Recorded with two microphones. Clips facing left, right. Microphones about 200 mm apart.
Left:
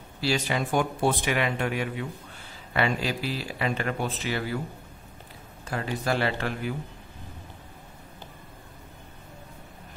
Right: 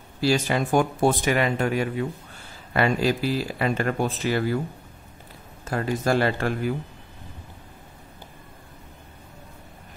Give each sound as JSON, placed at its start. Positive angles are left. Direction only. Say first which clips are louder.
{"t": 0.2, "sound": "speech", "louder": "right 5 dB", "side_deg": -45}
{"t": 5.7, "sound": "speech", "louder": "right 5 dB", "side_deg": -45}